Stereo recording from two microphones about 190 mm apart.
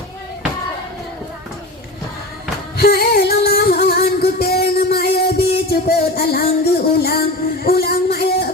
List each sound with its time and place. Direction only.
2.7 s singing: 55° left (ahead or behind)
4.7 s music: 55° left (ahead or behind)
5.7 s a sound: 55° left (ahead or behind)